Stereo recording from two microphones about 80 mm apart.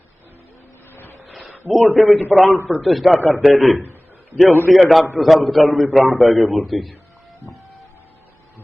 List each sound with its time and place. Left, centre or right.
1.3 s a sound: centre
1.7 s a man's voice: centre
2.0 s a man's voice: centre
2.3 s a man's voice: centre
3.8 s a sound: left
4.4 s a man's voice: left
4.7 s a man's voice: centre